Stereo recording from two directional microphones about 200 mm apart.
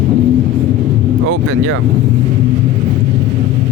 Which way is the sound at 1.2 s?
90° right.